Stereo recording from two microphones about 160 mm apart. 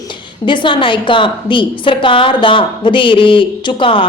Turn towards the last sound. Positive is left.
turn(degrees=30)  # may be behind; listen again after turning